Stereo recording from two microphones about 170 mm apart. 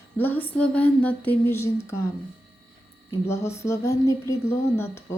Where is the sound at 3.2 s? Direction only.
15° left (ahead or behind).